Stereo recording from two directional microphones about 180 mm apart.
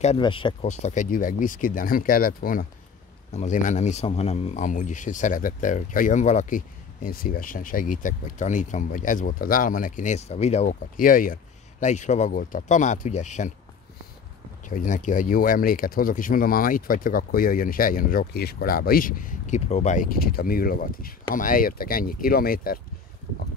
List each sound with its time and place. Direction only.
0.0 s speech: 30° left (ahead or behind)
0.7 s speech: 40° left (ahead or behind)
3.3 s speech: 40° left (ahead or behind)
14.7 s speech: 45° left (ahead or behind)